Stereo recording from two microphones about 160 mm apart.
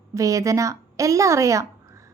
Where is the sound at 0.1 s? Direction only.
20° right (ahead or behind).